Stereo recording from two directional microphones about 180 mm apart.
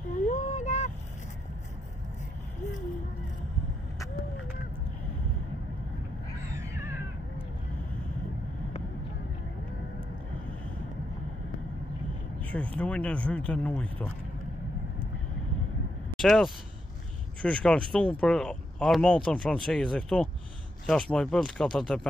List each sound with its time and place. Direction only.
0.1 s a sound: 45° left (ahead or behind)
6.5 s crow: 15° right (ahead or behind)
12.7 s speech: 5° left (ahead or behind)
16.2 s speech: centre (ahead or behind)